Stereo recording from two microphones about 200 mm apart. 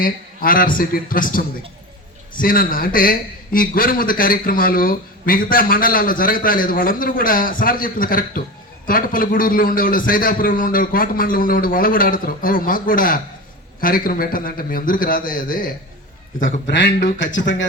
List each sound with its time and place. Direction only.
0.0 s a man's voice: 45° left (ahead or behind)
16.6 s speech: 60° left (ahead or behind)